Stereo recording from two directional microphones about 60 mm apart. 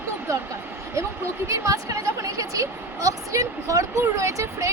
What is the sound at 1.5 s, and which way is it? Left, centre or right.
A woman's voice, right.